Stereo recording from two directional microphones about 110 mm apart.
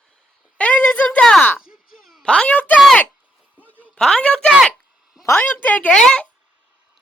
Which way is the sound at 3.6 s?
15° right (ahead or behind).